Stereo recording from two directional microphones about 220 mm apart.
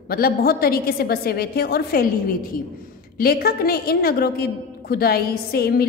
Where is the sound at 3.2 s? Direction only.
45° left (ahead or behind).